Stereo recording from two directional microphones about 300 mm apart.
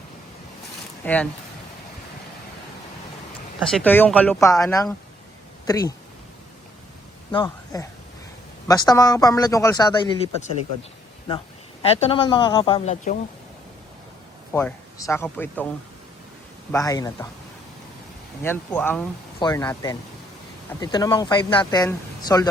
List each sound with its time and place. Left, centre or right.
1.0 s speech: centre
3.6 s speech: centre
7.3 s speech: centre
11.8 s speech: centre
14.5 s speech: centre
16.7 s speech: centre
18.4 s speech: centre